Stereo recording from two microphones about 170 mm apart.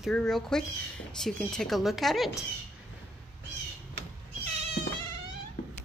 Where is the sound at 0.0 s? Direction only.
Centre (ahead or behind).